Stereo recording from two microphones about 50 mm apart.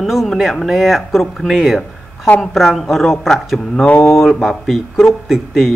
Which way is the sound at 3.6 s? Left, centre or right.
Centre.